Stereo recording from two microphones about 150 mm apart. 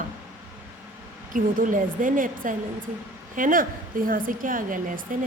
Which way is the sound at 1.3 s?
60° right (ahead or behind).